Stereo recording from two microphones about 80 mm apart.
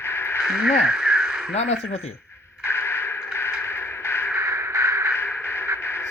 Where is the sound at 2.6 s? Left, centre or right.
Left.